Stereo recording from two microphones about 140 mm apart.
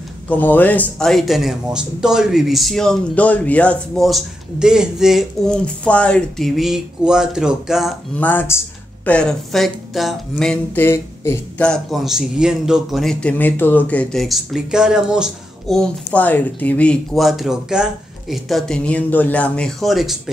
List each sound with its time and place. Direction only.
0.3 s a man's voice: 10° left (ahead or behind); by 5.2 s 5° right (ahead or behind)
5.9 s a man's voice: 5° left (ahead or behind)
8.2 s speech: 15° left (ahead or behind)
10.8 s speech: 15° left (ahead or behind)
11.6 s a man's voice: centre (ahead or behind)